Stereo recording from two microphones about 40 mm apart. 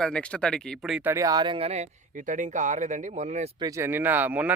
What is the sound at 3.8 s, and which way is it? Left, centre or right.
Speech, right.